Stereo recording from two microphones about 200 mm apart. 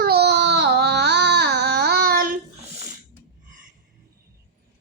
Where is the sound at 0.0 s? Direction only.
55° right (ahead or behind).